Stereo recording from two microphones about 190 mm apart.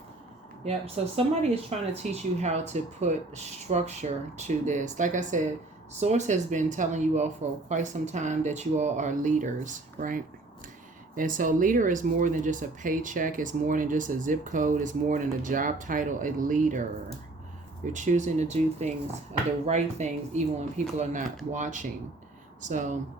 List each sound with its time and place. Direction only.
0.6 s speech: 35° right (ahead or behind)
17.9 s speech: 40° right (ahead or behind)